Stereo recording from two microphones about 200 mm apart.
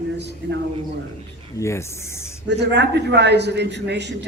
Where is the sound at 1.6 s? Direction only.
15° left (ahead or behind).